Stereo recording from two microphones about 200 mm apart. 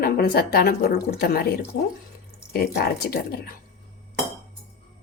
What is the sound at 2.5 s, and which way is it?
A woman's voice, 50° left (ahead or behind).